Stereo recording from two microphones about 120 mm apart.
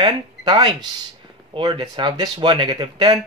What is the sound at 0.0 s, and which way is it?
Speech, 40° right (ahead or behind).